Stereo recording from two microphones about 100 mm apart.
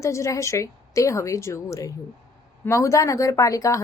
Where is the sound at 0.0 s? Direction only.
30° left (ahead or behind).